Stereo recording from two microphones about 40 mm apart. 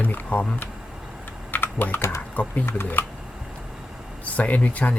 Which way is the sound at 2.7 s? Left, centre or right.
Left.